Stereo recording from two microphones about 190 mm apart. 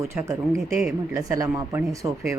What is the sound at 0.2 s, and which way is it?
Speech, 15° right (ahead or behind).